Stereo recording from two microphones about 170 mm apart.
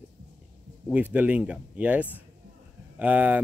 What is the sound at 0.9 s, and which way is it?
Speech, 10° right (ahead or behind).